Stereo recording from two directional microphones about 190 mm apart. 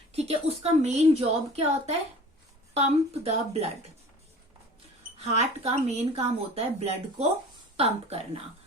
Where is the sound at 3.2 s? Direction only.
35° right (ahead or behind).